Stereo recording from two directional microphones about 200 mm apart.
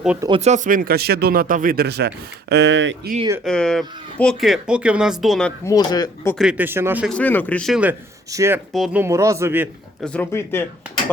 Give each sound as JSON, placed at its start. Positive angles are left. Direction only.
{"t": 0.2, "sound": "speech", "side_deg": -25}
{"t": 3.4, "sound": "speech", "side_deg": 5}
{"t": 5.6, "sound": "speech", "side_deg": 20}
{"t": 6.4, "sound": "speech", "side_deg": -5}
{"t": 7.1, "sound": "speech", "side_deg": 10}
{"t": 8.7, "sound": "speech", "side_deg": 0}
{"t": 9.0, "sound": "speech", "side_deg": -15}
{"t": 10.0, "sound": "speech", "side_deg": 5}